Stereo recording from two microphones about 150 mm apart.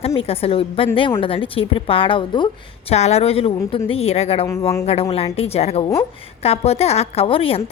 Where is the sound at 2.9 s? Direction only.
45° left (ahead or behind).